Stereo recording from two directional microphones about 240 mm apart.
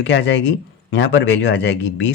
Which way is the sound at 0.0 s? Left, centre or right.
Left.